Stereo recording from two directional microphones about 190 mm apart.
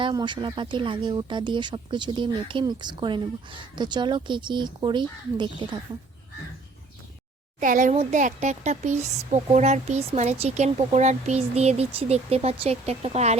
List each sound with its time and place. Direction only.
0.0 s speech: 25° right (ahead or behind)
7.6 s speech: 45° right (ahead or behind)